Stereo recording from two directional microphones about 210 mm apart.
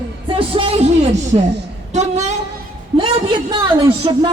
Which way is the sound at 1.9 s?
35° right (ahead or behind).